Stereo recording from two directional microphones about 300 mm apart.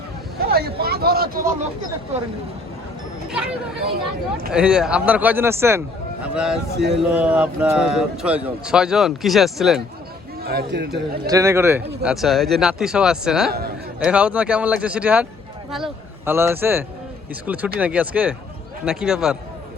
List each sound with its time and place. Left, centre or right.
0.3 s vehicle: right
0.8 s a sound: right
4.5 s speech: centre
10.4 s speech: right
11.3 s a man's voice: centre
13.5 s a man's voice: right
14.0 s a man's voice: centre